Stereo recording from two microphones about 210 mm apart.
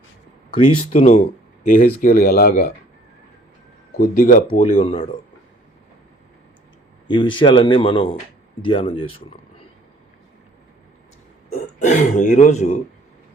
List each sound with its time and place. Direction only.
0.9 s speech: 35° left (ahead or behind)
3.9 s speech: 45° left (ahead or behind)
4.8 s a man's voice: 25° left (ahead or behind)
7.1 s a man's voice: 20° left (ahead or behind)
11.8 s speech: 35° left (ahead or behind)